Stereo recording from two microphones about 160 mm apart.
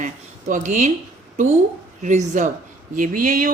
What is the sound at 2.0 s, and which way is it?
A woman's voice, 50° right (ahead or behind).